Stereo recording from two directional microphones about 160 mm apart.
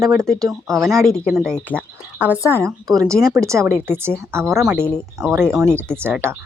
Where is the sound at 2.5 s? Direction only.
20° right (ahead or behind).